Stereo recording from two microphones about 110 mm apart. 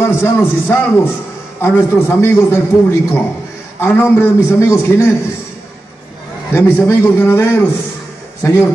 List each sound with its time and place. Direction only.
0.0 s a man's voice: 20° left (ahead or behind)
6.5 s a man's voice: 20° left (ahead or behind)